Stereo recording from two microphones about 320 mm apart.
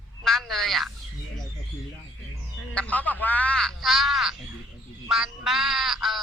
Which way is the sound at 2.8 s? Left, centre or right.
Centre.